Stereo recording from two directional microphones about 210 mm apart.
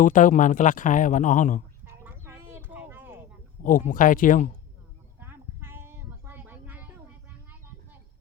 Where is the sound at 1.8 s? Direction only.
10° right (ahead or behind).